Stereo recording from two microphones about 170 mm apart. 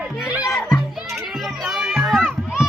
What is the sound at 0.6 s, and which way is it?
Music, centre (ahead or behind).